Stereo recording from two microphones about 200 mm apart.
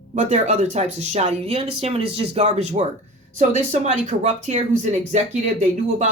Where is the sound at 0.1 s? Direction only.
35° right (ahead or behind).